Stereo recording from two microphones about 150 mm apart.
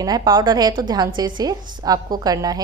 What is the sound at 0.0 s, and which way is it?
A woman's voice, 25° right (ahead or behind).